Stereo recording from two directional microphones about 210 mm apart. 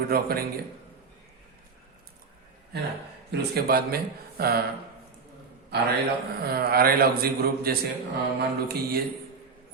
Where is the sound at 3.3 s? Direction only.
45° right (ahead or behind).